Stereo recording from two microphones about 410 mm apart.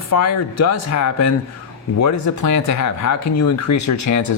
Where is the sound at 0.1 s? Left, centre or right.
Left.